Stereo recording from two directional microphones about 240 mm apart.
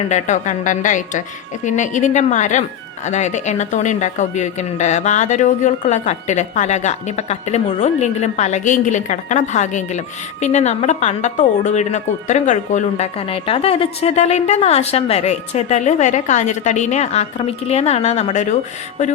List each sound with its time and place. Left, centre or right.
0.0 s speech: left